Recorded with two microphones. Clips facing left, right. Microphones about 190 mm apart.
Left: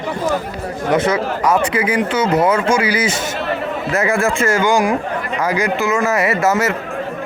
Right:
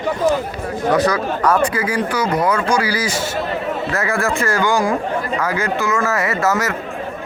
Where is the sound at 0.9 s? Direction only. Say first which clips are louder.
Left 1 dB; 20° left (ahead or behind).